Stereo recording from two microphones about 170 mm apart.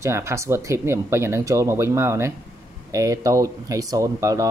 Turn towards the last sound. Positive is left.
turn(degrees=-20)  # may be behind; listen again after turning